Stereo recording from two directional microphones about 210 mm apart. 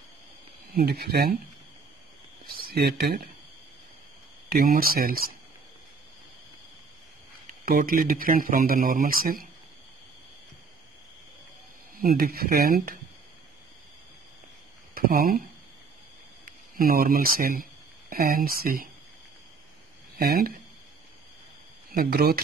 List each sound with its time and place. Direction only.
0.7 s a man's voice: 50° right (ahead or behind)
2.4 s a sound: 45° right (ahead or behind)
4.5 s a man's voice: 45° right (ahead or behind)
7.6 s a man's voice: 45° right (ahead or behind)
12.0 s a man's voice: 45° right (ahead or behind)
15.0 s a man's voice: 45° right (ahead or behind)
16.4 s a man's voice: 45° right (ahead or behind)
20.2 s a man's voice: 45° right (ahead or behind)
21.9 s a man's voice: 45° right (ahead or behind)